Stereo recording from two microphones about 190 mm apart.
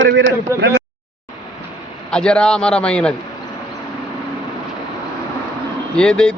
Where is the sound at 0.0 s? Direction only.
70° right (ahead or behind).